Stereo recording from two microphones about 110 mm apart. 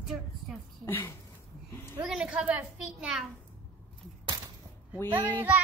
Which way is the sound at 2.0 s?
5° right (ahead or behind).